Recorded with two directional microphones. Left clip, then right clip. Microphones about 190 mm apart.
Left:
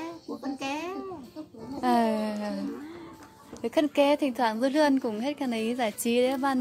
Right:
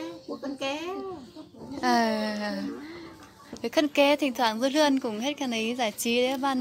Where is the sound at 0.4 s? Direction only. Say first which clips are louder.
Right 1 dB; 20° left (ahead or behind).